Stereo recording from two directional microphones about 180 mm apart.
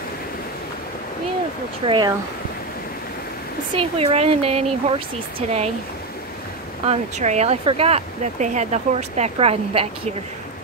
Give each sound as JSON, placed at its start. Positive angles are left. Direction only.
{"t": 1.9, "sound": "speech", "side_deg": -25}
{"t": 3.7, "sound": "speech", "side_deg": -35}
{"t": 6.9, "sound": "speech", "side_deg": -40}